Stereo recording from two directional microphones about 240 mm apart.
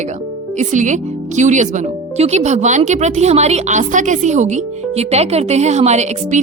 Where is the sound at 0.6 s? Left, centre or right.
Right.